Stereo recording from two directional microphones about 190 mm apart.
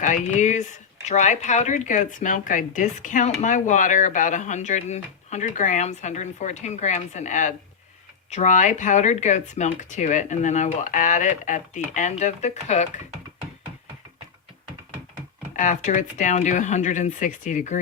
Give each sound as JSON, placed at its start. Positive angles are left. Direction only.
{"t": 0.0, "sound": "speech", "side_deg": 40}
{"t": 15.5, "sound": "speech", "side_deg": 45}